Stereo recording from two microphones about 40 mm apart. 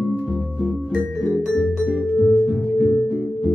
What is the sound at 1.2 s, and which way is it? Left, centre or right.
Music, centre.